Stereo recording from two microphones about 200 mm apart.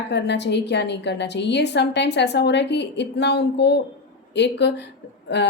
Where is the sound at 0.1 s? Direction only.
60° left (ahead or behind).